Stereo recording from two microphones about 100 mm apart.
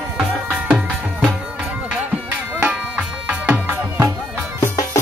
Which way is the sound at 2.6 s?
10° right (ahead or behind).